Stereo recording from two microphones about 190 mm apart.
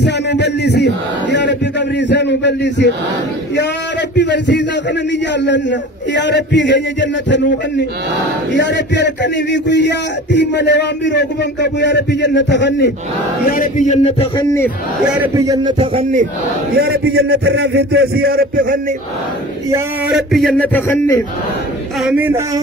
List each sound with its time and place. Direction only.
0.0 s speech: 65° left (ahead or behind)
4.1 s a man's voice: 65° left (ahead or behind)
13.5 s male singing: 45° left (ahead or behind)
14.3 s a man's voice: 15° left (ahead or behind)
15.3 s a man's voice: 20° right (ahead or behind); by 16.3 s 35° right (ahead or behind)
16.7 s a man's voice: 55° right (ahead or behind)
20.1 s a man's voice: centre (ahead or behind)
22.0 s speech: 10° right (ahead or behind)